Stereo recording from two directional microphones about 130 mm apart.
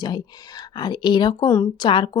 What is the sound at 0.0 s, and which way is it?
Speech, 30° left (ahead or behind).